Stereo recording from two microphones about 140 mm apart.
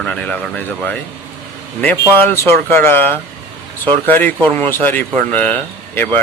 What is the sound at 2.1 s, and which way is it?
Speech, 15° left (ahead or behind).